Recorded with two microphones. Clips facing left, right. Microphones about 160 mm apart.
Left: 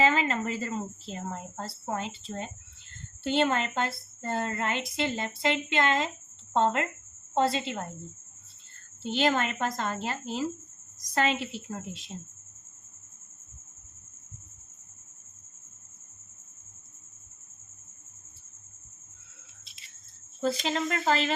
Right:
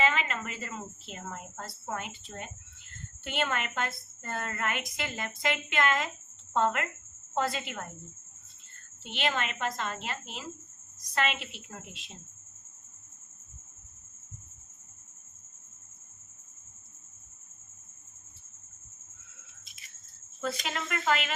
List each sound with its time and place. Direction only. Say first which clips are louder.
0.0 s a woman's voice: left 4 dB; 35° left (ahead or behind)
9.0 s a woman's voice: left 6 dB; 35° left (ahead or behind)
20.4 s a woman's voice: left 6 dB; 30° left (ahead or behind)